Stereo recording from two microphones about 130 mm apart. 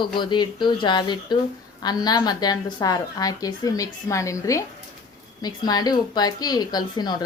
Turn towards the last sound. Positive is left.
turn(degrees=35)  # may be behind; listen again after turning